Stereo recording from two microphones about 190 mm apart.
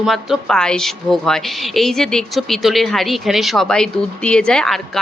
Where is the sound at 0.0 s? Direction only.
Centre (ahead or behind).